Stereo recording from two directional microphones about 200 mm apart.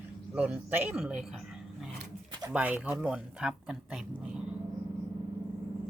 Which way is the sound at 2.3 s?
20° right (ahead or behind).